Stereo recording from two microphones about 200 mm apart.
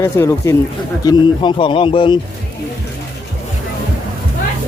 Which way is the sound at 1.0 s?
25° left (ahead or behind).